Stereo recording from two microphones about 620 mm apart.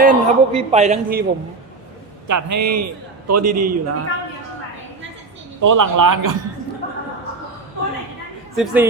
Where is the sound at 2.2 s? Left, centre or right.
Right.